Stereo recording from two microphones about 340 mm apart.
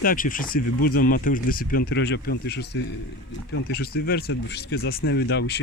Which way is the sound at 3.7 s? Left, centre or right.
Left.